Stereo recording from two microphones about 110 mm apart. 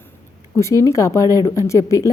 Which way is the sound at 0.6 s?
30° left (ahead or behind).